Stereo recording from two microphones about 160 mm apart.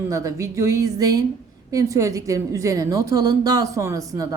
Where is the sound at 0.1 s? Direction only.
20° right (ahead or behind).